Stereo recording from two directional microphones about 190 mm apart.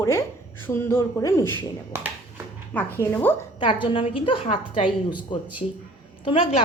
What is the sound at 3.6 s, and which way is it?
Speech, 25° left (ahead or behind).